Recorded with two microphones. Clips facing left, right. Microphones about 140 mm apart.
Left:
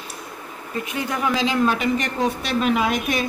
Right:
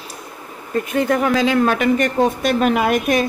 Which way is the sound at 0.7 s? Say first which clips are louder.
Right 8 dB; 55° right (ahead or behind).